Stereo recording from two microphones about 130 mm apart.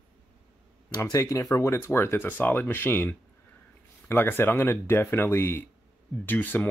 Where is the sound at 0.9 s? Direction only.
25° left (ahead or behind).